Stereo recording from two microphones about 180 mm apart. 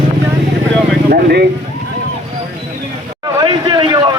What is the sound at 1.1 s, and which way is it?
Speech, 60° right (ahead or behind).